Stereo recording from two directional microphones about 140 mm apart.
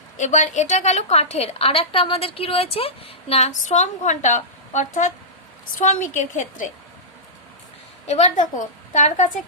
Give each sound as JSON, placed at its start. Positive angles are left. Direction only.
{"t": 0.2, "sound": "a woman's voice", "side_deg": 60}
{"t": 8.0, "sound": "a woman's voice", "side_deg": 55}